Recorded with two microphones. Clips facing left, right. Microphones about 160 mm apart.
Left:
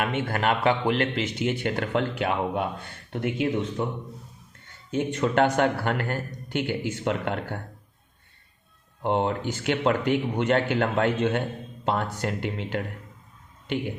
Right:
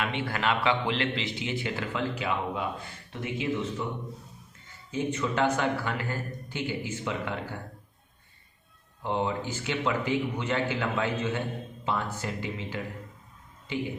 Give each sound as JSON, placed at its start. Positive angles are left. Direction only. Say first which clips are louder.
{"t": 0.0, "sound": "a man's voice", "louder": "left 4 dB", "side_deg": 45}
{"t": 4.9, "sound": "a man's voice", "louder": "left 4 dB", "side_deg": 70}
{"t": 9.0, "sound": "a man's voice", "louder": "left 4 dB", "side_deg": 65}